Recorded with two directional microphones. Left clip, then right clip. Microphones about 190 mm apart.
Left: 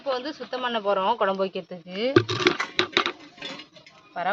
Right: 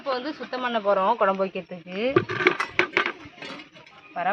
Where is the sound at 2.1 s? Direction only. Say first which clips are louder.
Left 3 dB; 65° left (ahead or behind).